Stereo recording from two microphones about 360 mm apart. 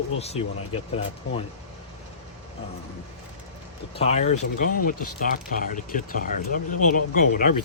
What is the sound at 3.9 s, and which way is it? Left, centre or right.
Speech, centre.